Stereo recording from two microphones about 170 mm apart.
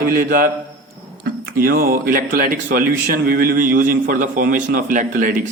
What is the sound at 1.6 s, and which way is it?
A man's voice, 60° right (ahead or behind).